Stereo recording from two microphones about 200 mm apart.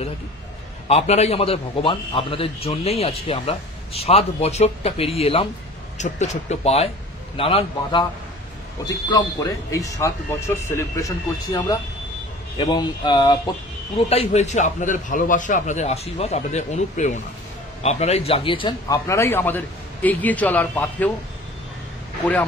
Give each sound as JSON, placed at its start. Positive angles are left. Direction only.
{"t": 0.8, "sound": "a man's voice", "side_deg": 30}